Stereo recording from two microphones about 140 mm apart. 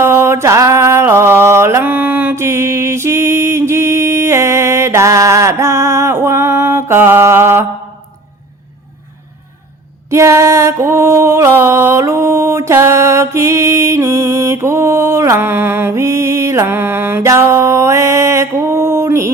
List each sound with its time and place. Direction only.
0.0 s mantra: 20° right (ahead or behind)
10.1 s music: 20° right (ahead or behind)